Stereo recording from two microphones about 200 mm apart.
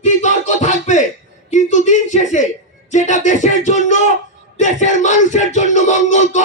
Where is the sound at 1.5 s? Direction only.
35° left (ahead or behind).